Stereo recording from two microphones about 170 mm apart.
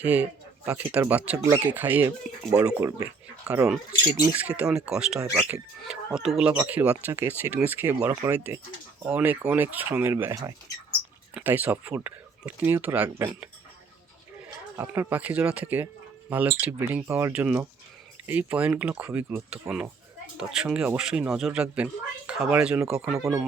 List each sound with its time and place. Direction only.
0.0 s speech: 10° right (ahead or behind)
14.8 s speech: 10° right (ahead or behind)